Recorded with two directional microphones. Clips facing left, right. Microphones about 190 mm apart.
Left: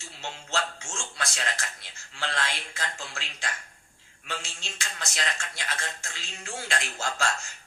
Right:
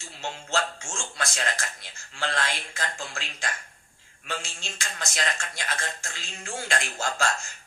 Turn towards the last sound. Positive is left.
turn(degrees=-50)  # may be behind; listen again after turning